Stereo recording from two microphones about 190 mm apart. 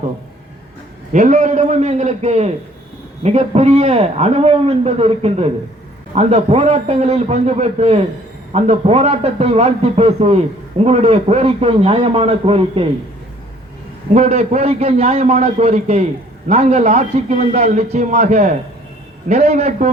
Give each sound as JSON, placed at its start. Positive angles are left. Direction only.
{"t": 1.1, "sound": "a man's voice", "side_deg": -40}
{"t": 14.1, "sound": "a man's voice", "side_deg": -35}